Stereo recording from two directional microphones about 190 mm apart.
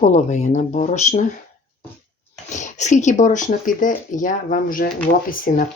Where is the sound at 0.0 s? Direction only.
40° left (ahead or behind).